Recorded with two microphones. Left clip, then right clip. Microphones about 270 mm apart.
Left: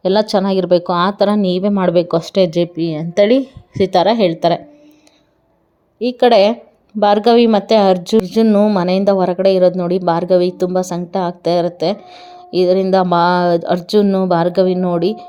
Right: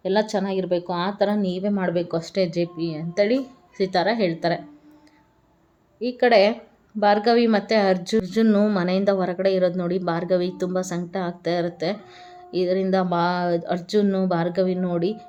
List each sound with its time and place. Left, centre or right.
0.0 s a woman's voice: left
6.0 s speech: left